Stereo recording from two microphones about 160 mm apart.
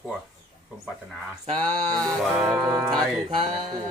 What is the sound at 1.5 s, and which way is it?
Speech, 10° left (ahead or behind).